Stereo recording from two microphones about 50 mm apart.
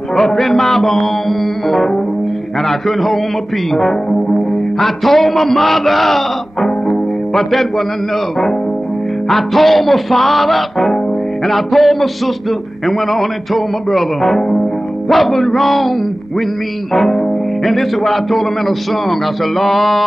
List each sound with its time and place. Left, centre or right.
0.1 s music: centre
4.1 s music: centre
4.7 s music: centre
9.3 s music: centre
16.9 s music: centre